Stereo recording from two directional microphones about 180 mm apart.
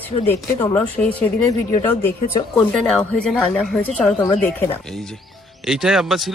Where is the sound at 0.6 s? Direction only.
10° left (ahead or behind).